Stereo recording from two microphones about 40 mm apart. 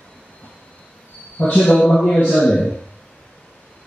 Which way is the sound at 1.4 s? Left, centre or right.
Left.